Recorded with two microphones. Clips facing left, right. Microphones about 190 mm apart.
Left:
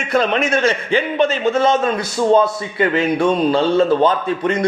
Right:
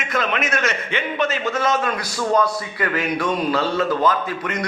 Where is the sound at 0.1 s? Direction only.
30° left (ahead or behind).